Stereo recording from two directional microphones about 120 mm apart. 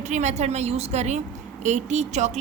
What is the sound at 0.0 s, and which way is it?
Speech, 80° right.